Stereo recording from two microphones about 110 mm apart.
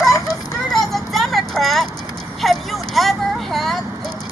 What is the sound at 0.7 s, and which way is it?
Vehicle, centre (ahead or behind).